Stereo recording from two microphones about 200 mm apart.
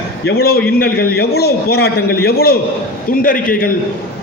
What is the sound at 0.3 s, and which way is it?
A man's voice, 50° left (ahead or behind).